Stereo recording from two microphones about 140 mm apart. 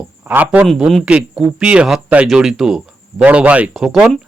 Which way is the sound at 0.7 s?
Centre (ahead or behind).